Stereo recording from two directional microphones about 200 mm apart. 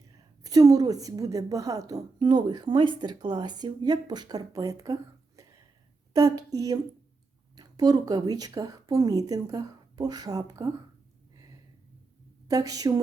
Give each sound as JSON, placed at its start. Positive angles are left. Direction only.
{"t": 0.4, "sound": "speech", "side_deg": -15}
{"t": 6.1, "sound": "a woman's voice", "side_deg": -20}
{"t": 12.5, "sound": "a woman's voice", "side_deg": -15}